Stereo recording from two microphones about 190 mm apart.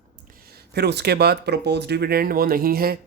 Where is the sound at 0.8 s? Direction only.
60° right (ahead or behind).